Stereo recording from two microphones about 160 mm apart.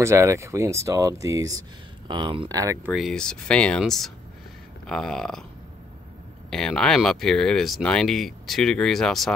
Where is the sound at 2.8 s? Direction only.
Centre (ahead or behind).